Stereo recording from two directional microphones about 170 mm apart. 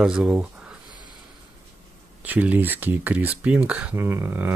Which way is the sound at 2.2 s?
10° right (ahead or behind).